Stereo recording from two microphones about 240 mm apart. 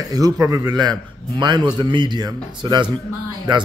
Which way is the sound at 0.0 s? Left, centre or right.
Centre.